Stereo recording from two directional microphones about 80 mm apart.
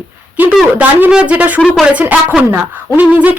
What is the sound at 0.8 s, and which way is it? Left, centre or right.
A woman's voice, right.